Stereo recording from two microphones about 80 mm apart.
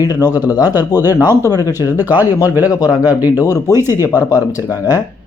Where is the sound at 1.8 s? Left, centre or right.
Right.